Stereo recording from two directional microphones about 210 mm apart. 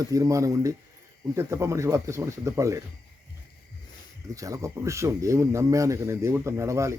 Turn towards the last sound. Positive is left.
turn(degrees=-15)  # may be behind; listen again after turning